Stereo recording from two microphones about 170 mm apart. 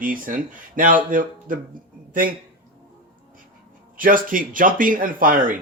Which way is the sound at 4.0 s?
55° right (ahead or behind).